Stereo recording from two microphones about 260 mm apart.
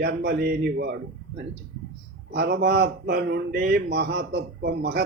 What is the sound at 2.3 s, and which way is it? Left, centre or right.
Speech, right.